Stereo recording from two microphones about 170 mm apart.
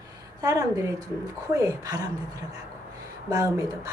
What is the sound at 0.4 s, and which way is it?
A woman's voice, 20° right (ahead or behind).